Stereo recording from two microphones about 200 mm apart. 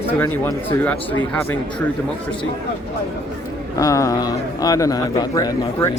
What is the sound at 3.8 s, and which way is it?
Speech, 15° left (ahead or behind).